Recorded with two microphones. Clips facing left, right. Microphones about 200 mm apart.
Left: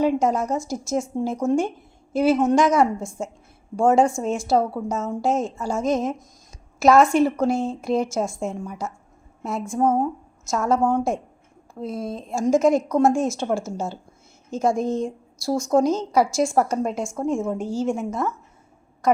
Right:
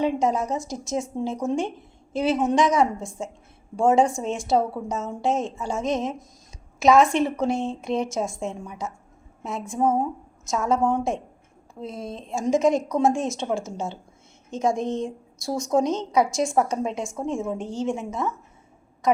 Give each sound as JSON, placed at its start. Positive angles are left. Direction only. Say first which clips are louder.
{"t": 0.0, "sound": "a woman's voice", "louder": "left 2 dB", "side_deg": 0}